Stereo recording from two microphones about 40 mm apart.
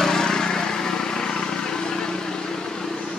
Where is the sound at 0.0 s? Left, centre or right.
Centre.